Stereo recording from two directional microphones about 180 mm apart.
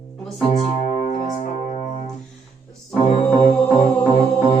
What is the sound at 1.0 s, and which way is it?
Music, 45° left (ahead or behind).